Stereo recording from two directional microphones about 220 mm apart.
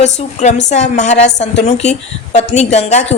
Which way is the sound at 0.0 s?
30° left (ahead or behind).